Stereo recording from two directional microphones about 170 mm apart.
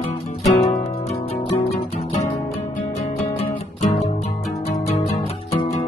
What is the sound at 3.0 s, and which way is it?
Music, 40° left (ahead or behind).